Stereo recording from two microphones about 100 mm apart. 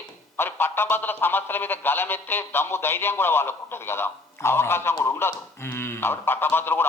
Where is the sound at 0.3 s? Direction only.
25° left (ahead or behind).